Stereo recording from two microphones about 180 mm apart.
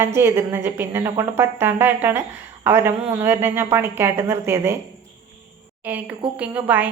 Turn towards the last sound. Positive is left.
turn(degrees=-10)  # may be behind; listen again after turning